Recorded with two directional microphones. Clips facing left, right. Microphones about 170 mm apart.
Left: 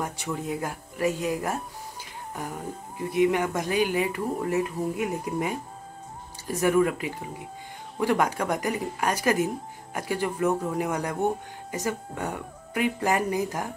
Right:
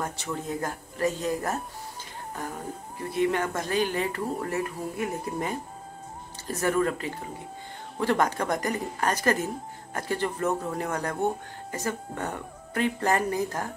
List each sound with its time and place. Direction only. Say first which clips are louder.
0.0 s speech: left 1 dB; 10° left (ahead or behind)
3.0 s speech: left 3 dB; 15° left (ahead or behind)